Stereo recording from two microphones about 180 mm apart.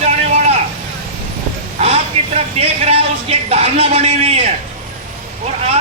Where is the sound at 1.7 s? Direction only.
35° right (ahead or behind).